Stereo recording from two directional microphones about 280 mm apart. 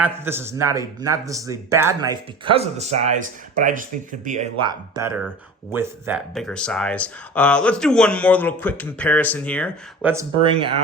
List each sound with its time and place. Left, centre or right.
0.0 s speech: centre
10.0 s speech: centre
10.4 s speech: centre